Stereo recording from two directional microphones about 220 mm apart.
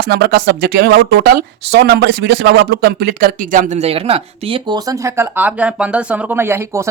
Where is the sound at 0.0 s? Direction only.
45° right (ahead or behind).